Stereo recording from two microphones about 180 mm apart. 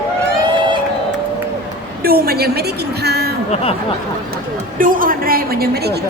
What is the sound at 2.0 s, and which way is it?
A woman's voice, 55° right (ahead or behind).